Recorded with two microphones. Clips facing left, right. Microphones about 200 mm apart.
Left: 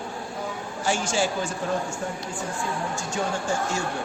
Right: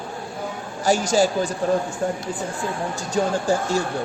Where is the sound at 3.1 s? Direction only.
35° right (ahead or behind).